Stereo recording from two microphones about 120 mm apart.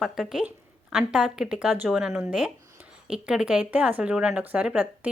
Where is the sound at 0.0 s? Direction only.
5° right (ahead or behind).